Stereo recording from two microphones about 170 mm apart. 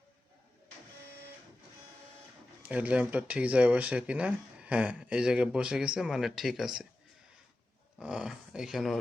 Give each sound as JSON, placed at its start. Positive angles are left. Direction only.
{"t": 2.6, "sound": "speech", "side_deg": -10}
{"t": 7.9, "sound": "speech", "side_deg": -5}